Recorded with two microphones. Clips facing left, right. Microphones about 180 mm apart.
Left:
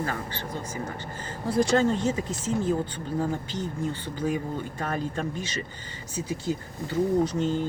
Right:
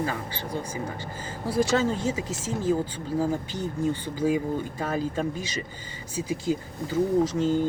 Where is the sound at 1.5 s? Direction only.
5° right (ahead or behind).